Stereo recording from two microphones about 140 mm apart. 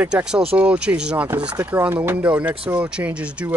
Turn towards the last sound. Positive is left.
turn(degrees=-10)  # may be behind; listen again after turning